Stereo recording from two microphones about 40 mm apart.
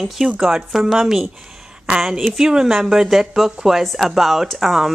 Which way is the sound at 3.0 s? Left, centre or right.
Centre.